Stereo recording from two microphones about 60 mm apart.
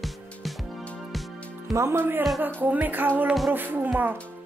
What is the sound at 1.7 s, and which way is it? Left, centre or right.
Speech, right.